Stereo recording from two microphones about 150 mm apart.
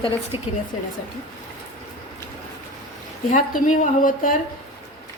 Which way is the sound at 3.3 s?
55° left (ahead or behind).